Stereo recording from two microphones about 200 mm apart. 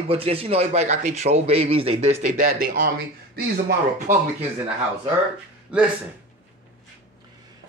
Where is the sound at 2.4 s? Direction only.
45° right (ahead or behind).